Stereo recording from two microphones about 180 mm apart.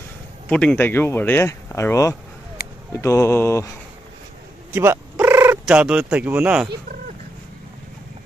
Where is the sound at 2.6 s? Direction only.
60° left (ahead or behind).